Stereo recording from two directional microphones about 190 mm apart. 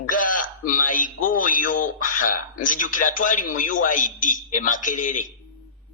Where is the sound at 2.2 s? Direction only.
45° left (ahead or behind).